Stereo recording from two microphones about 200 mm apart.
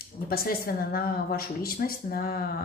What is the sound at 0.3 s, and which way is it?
A woman's voice, 50° left (ahead or behind).